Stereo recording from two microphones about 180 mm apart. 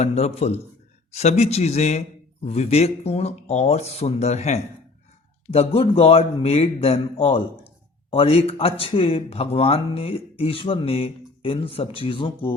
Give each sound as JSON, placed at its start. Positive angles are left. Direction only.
{"t": 0.0, "sound": "speech", "side_deg": 35}